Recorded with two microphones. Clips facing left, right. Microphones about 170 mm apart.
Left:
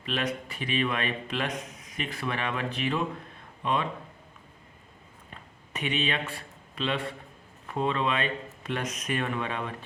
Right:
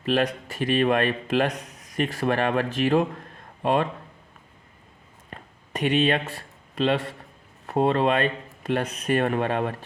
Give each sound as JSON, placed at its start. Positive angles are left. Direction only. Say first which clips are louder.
{"t": 0.0, "sound": "a man's voice", "louder": "right 7 dB", "side_deg": -40}
{"t": 5.7, "sound": "a man's voice", "louder": "right 8 dB", "side_deg": -40}
{"t": 9.1, "sound": "a man's voice", "louder": "right 9 dB", "side_deg": -50}